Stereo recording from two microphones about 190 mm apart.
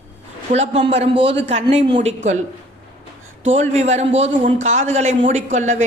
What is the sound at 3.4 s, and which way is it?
Speech, 35° right (ahead or behind).